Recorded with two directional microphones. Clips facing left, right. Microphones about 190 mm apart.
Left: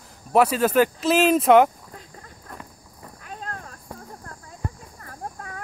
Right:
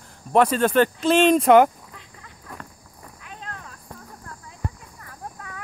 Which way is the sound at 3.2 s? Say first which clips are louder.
Left 3 dB; 40° left (ahead or behind).